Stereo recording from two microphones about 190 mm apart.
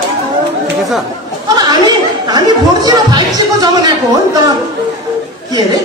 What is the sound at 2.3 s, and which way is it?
Speech, 20° right (ahead or behind).